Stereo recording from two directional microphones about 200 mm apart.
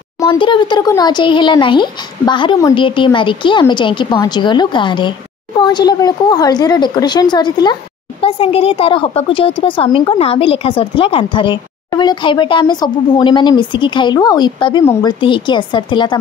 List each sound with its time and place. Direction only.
0.2 s speech: 25° left (ahead or behind)